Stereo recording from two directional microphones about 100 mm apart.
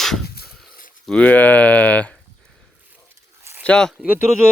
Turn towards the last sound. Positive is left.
turn(degrees=-15)  # may be behind; listen again after turning